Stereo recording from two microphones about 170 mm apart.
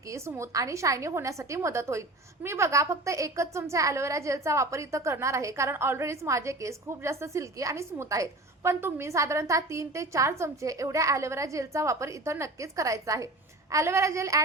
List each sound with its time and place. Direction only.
0.1 s a woman's voice: 15° right (ahead or behind)